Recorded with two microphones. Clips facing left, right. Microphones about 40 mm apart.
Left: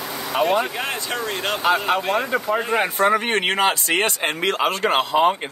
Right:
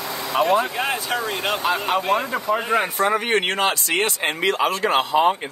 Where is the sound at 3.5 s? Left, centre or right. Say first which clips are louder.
Left 2 dB; left.